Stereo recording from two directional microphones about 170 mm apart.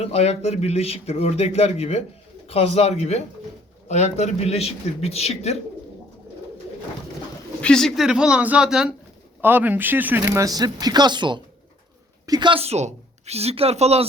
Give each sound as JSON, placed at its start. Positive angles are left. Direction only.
{"t": 0.0, "sound": "a man's voice", "side_deg": 35}
{"t": 7.6, "sound": "a woman's voice", "side_deg": 5}